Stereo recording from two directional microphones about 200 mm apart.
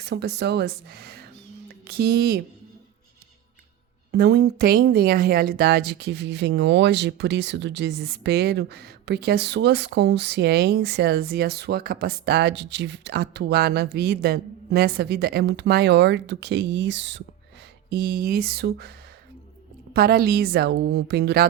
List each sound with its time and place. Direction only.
0.0 s a woman's voice: 60° right (ahead or behind)
4.1 s speech: 55° right (ahead or behind)
17.8 s a woman's voice: 50° right (ahead or behind)